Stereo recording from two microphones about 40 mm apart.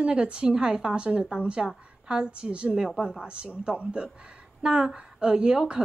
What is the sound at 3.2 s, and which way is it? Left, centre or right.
Speech, right.